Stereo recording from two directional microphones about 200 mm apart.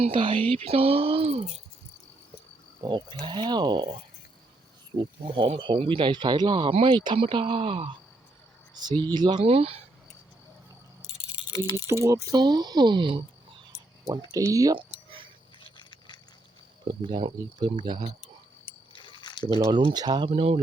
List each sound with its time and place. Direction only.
0.0 s speech: 25° right (ahead or behind)
2.8 s speech: 25° right (ahead or behind)
4.9 s speech: 25° right (ahead or behind)
11.9 s speech: 15° right (ahead or behind)
14.3 s a sound: 15° right (ahead or behind)
15.6 s vehicle: 25° left (ahead or behind)
16.8 s speech: 25° right (ahead or behind)
18.9 s a sound: 25° left (ahead or behind)
19.5 s speech: 25° right (ahead or behind)